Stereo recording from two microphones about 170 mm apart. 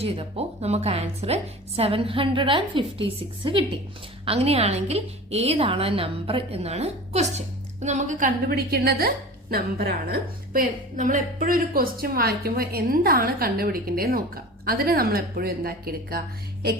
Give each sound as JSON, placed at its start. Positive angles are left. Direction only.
{"t": 0.0, "sound": "a woman's voice", "side_deg": -35}